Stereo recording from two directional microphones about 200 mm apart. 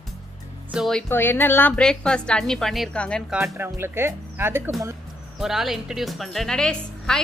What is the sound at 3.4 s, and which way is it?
Speech, 10° right (ahead or behind).